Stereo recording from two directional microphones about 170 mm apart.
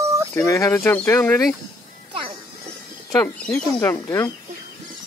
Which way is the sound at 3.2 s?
5° left (ahead or behind).